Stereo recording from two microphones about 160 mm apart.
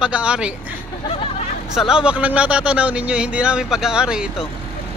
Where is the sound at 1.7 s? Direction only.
5° right (ahead or behind).